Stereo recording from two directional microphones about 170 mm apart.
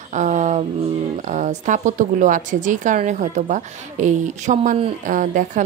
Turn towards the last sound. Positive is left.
turn(degrees=-50)  # may be behind; listen again after turning